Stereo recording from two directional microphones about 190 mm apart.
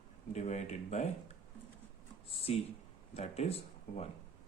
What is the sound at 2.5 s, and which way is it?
Speech, 30° left (ahead or behind).